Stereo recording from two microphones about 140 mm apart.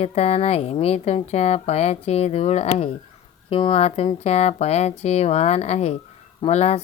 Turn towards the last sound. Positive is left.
turn(degrees=50)  # may be behind; listen again after turning